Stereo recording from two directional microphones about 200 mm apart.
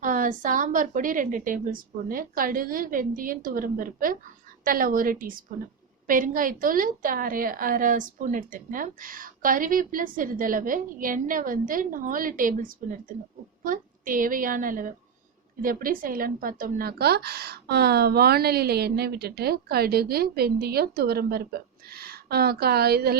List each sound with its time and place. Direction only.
0.0 s speech: 40° right (ahead or behind)